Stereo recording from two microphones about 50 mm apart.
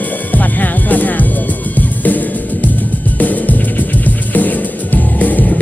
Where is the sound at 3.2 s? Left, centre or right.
Left.